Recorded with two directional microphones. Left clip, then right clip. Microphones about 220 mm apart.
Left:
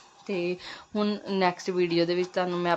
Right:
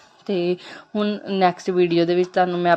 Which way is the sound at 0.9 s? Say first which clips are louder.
Right 6 dB; 5° right (ahead or behind).